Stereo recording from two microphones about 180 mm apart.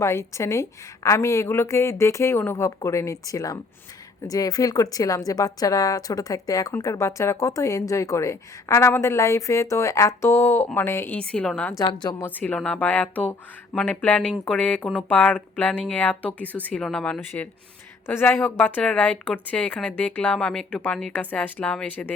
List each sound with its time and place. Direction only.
0.0 s a woman's voice: 15° left (ahead or behind)
11.8 s a woman's voice: 20° left (ahead or behind)
12.4 s a woman's voice: 5° left (ahead or behind)